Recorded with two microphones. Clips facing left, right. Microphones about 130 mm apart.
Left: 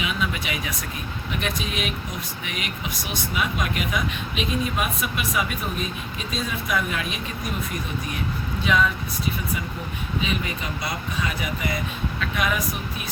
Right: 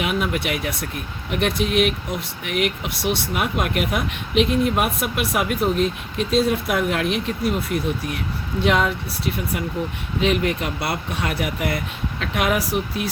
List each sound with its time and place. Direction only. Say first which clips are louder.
0.0 s speech: right 5 dB; 65° right (ahead or behind)